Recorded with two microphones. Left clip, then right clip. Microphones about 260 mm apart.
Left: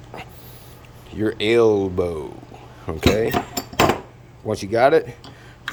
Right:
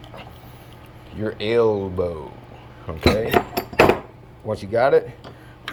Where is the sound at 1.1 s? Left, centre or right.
Centre.